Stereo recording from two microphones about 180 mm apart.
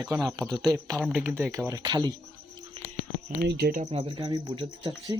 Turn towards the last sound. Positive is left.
turn(degrees=-25)  # may be behind; listen again after turning